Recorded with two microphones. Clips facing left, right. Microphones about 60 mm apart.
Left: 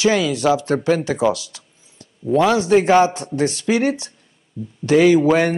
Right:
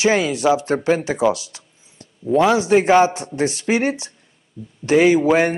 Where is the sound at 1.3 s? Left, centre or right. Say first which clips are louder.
Even; right.